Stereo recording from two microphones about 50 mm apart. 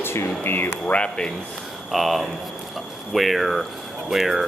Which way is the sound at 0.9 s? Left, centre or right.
Left.